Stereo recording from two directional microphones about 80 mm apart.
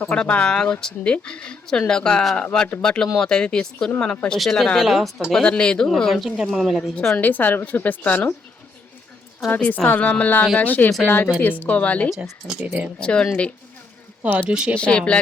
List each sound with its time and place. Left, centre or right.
0.0 s speech: centre
7.2 s a woman's voice: left
9.6 s a woman's voice: centre
12.1 s speech: centre
13.0 s speech: centre
14.8 s speech: centre